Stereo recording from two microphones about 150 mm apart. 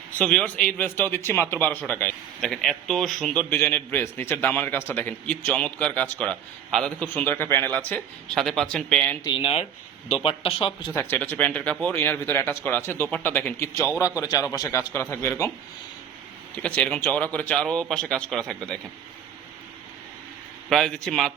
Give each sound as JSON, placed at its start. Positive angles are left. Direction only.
{"t": 0.2, "sound": "a man's voice", "side_deg": 5}
{"t": 3.5, "sound": "a man's voice", "side_deg": 15}
{"t": 9.2, "sound": "a man's voice", "side_deg": 35}
{"t": 10.9, "sound": "a man's voice", "side_deg": 15}
{"t": 16.6, "sound": "a man's voice", "side_deg": 5}
{"t": 20.7, "sound": "a man's voice", "side_deg": 0}